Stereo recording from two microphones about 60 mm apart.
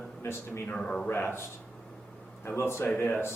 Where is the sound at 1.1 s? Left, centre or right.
Left.